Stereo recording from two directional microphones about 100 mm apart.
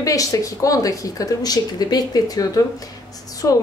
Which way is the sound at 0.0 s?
35° left (ahead or behind).